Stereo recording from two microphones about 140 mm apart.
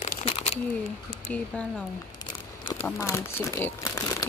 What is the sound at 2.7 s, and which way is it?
Speech, 20° left (ahead or behind).